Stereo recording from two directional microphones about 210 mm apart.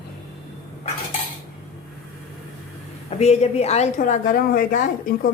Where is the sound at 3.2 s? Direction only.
30° left (ahead or behind).